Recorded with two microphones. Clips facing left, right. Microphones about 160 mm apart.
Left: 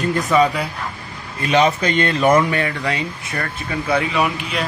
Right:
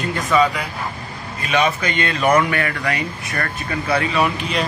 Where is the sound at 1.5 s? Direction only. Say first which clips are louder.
Left 3 dB; 30° left (ahead or behind); by 4.6 s 10° left (ahead or behind).